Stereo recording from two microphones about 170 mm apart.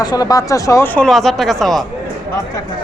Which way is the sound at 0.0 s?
25° left (ahead or behind).